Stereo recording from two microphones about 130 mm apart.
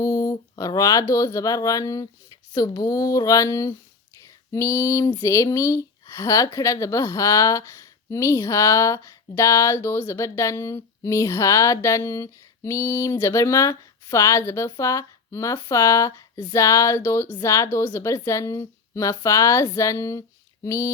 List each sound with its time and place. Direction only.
0.0 s speech: 30° left (ahead or behind)